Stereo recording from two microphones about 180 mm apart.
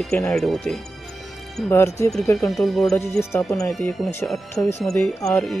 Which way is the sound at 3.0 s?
15° left (ahead or behind).